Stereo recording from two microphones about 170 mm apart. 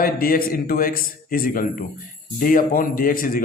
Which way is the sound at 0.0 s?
60° left (ahead or behind).